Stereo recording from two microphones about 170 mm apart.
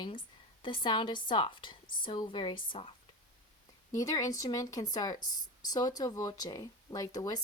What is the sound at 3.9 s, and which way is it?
A woman's voice, 20° left (ahead or behind).